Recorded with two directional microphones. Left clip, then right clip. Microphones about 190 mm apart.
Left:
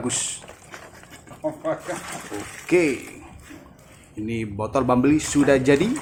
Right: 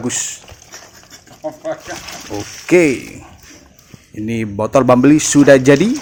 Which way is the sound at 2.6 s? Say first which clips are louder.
Right 8 dB; 25° right (ahead or behind).